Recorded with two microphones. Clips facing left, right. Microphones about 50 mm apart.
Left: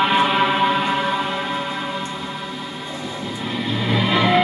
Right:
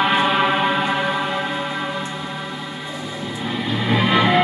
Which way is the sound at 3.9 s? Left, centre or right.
Right.